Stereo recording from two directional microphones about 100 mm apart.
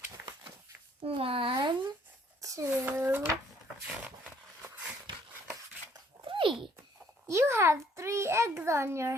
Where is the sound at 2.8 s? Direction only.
20° right (ahead or behind).